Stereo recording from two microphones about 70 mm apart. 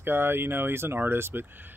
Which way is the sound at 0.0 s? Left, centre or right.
Right.